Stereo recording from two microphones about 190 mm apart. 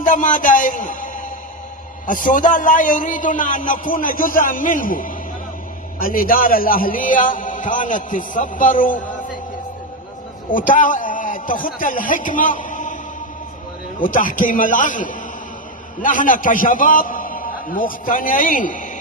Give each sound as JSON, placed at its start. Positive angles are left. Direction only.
{"t": 0.0, "sound": "a man's voice", "side_deg": 45}
{"t": 10.5, "sound": "a man's voice", "side_deg": 45}
{"t": 14.0, "sound": "a man's voice", "side_deg": 45}